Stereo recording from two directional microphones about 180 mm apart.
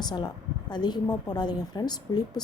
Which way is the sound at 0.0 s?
25° left (ahead or behind).